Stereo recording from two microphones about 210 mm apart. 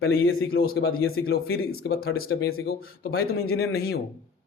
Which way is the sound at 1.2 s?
50° left (ahead or behind).